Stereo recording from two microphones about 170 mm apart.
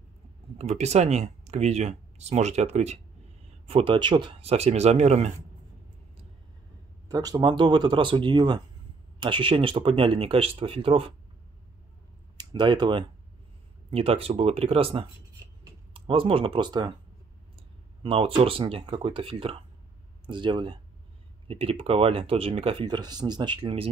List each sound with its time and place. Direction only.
0.6 s speech: 40° right (ahead or behind)
7.1 s speech: 25° right (ahead or behind)
12.4 s speech: 25° right (ahead or behind)
18.0 s speech: 30° right (ahead or behind)